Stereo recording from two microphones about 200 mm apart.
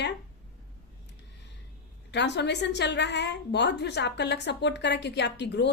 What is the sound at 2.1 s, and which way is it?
A woman's voice, 60° left (ahead or behind).